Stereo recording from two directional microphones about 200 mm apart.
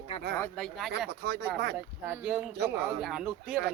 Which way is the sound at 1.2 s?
55° right (ahead or behind).